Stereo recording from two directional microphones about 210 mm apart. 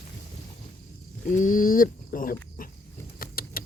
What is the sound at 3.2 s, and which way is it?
Vehicle, 45° left (ahead or behind).